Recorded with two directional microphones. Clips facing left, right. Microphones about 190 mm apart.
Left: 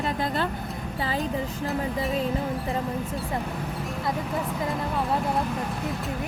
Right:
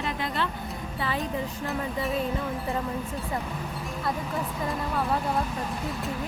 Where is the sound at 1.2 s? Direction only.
Centre (ahead or behind).